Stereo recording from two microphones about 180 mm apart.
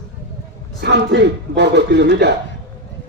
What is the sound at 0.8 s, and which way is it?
Speech, 75° right (ahead or behind).